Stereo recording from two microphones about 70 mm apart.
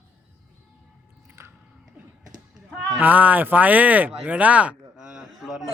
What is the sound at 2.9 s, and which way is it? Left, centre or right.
Speech, right.